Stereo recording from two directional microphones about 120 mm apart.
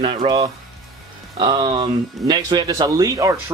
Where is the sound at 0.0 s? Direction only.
45° right (ahead or behind).